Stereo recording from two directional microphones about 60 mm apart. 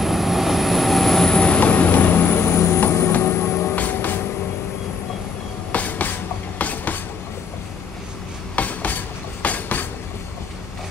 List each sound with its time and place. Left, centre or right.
0.0 s vehicle: centre
1.6 s train: left
3.1 s vehicle: left
3.7 s train: left
5.7 s a sound: left
6.6 s train: left
8.5 s a sound: left